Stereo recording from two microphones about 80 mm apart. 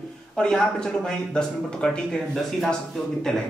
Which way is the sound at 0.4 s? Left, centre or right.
Centre.